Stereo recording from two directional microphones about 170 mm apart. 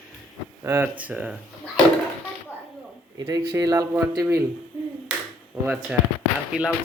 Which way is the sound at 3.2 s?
20° right (ahead or behind).